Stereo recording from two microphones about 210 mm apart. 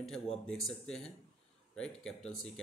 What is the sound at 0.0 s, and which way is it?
Speech, centre (ahead or behind).